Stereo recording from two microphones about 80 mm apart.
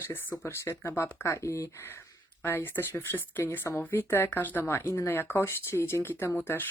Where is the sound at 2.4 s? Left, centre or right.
Left.